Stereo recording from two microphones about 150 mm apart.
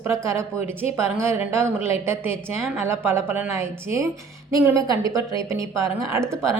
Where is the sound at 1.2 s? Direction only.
15° right (ahead or behind).